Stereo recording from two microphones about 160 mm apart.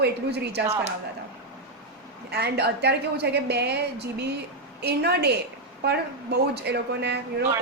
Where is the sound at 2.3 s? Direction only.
90° right.